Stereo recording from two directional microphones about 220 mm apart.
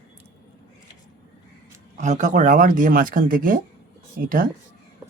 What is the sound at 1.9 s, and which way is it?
Speech, 35° right (ahead or behind).